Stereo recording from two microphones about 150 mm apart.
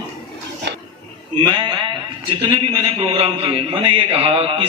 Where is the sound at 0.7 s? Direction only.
90° right.